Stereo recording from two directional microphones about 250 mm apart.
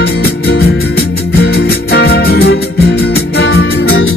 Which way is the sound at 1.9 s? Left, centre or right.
Left.